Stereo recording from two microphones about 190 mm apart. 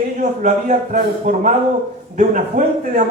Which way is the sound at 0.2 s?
40° right (ahead or behind).